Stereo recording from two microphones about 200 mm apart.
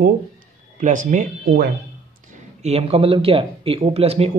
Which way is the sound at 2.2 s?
30° right (ahead or behind).